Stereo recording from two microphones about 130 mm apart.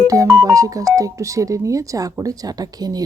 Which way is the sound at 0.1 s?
25° right (ahead or behind).